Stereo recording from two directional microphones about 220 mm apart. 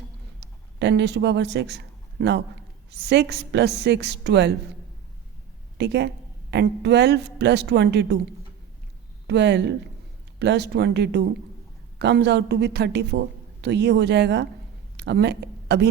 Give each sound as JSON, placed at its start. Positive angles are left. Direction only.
{"t": 0.8, "sound": "a man's voice", "side_deg": -50}
{"t": 5.7, "sound": "a woman's voice", "side_deg": -50}
{"t": 9.2, "sound": "a woman's voice", "side_deg": -50}